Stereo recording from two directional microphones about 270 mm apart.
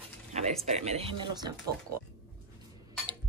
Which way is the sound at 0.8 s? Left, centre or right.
Right.